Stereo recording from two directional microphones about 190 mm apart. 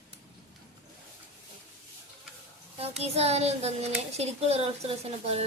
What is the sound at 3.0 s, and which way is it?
A woman's voice, 35° right (ahead or behind).